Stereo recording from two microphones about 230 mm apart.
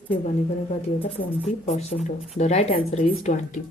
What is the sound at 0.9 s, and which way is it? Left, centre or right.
A woman's voice, left.